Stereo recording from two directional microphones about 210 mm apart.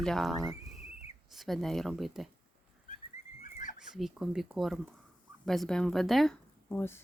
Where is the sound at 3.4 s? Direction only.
35° left (ahead or behind).